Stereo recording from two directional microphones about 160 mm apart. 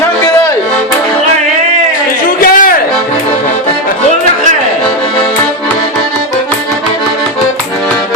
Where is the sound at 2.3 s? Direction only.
60° left (ahead or behind).